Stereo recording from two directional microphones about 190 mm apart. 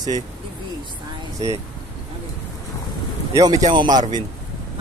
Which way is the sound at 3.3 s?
20° right (ahead or behind).